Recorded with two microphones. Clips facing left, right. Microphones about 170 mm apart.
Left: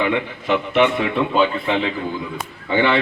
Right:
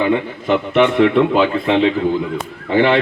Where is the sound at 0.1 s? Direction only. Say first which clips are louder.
Right 4 dB; 50° right (ahead or behind).